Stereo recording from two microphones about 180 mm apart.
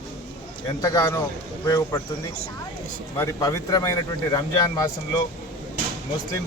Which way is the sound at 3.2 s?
15° left (ahead or behind).